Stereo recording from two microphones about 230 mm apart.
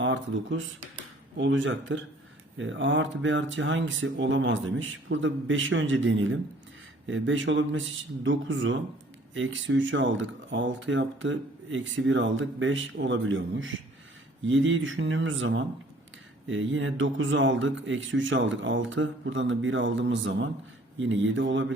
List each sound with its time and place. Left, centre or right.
0.0 s speech: right